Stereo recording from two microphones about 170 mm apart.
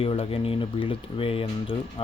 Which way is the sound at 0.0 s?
35° left (ahead or behind).